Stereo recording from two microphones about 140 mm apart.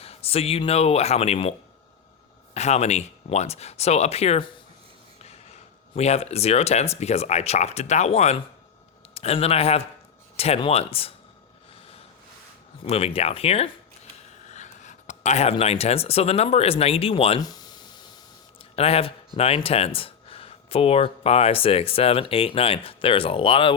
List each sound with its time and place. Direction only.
0.0 s speech: 45° left (ahead or behind)
2.6 s speech: 50° left (ahead or behind)
12.8 s speech: 45° left (ahead or behind)
14.5 s speech: 60° left (ahead or behind); by 17.4 s 45° left (ahead or behind)
17.4 s a sound: 30° left (ahead or behind)
18.8 s speech: 45° left (ahead or behind)